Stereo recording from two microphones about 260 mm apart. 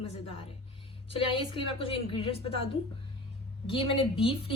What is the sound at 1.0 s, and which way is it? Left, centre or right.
A woman's voice, left.